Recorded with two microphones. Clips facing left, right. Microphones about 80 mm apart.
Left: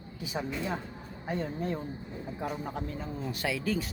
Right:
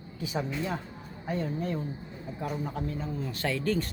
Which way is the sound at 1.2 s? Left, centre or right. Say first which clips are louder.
Right 1 dB; left.